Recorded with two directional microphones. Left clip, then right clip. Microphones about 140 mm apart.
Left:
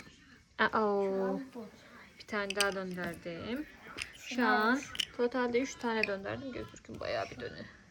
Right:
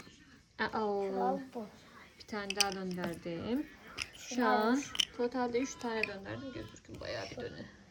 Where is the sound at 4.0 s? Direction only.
45° right (ahead or behind).